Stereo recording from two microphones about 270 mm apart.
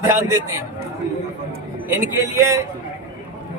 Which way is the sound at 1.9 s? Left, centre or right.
Centre.